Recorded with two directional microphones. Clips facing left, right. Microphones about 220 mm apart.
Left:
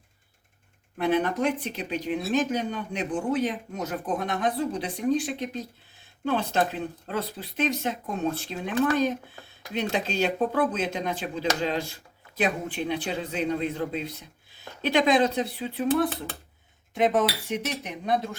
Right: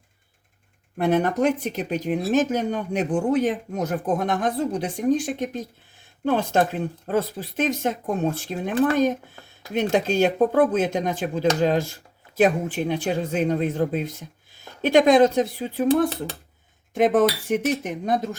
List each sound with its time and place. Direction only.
0.9 s speech: 45° right (ahead or behind)